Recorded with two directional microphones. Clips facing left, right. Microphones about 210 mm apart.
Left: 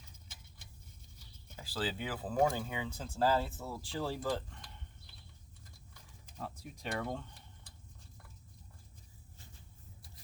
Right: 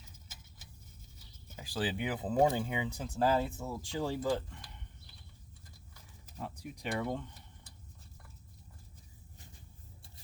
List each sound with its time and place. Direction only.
1.5 s speech: 15° right (ahead or behind)
6.2 s speech: 10° right (ahead or behind)